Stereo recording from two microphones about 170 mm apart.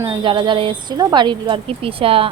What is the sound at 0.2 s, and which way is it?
Speech, 25° right (ahead or behind).